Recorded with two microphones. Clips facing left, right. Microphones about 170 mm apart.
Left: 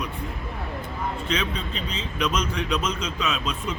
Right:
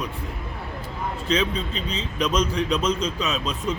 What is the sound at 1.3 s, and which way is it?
A man's voice, 35° right (ahead or behind).